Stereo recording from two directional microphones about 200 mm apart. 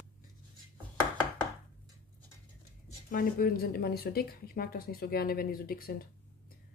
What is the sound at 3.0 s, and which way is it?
Speech, 45° left (ahead or behind).